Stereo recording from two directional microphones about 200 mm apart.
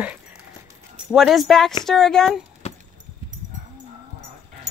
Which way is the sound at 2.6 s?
35° left (ahead or behind).